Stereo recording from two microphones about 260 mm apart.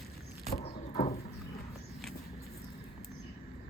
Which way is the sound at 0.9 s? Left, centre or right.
Left.